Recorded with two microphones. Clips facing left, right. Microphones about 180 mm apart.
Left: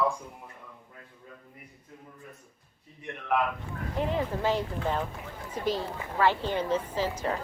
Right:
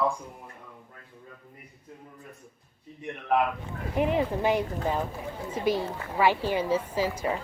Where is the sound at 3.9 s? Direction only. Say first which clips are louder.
Right 4 dB; 15° right (ahead or behind).